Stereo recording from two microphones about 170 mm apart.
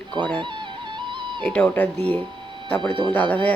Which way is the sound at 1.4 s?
5° left (ahead or behind).